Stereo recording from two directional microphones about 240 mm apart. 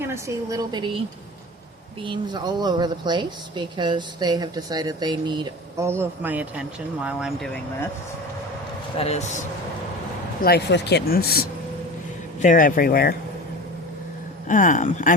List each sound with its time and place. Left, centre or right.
0.0 s speech: centre
2.0 s speech: centre
9.0 s speech: left
10.4 s speech: left
14.4 s speech: left